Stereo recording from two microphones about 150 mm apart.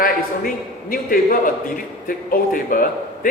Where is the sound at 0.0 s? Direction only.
70° left (ahead or behind).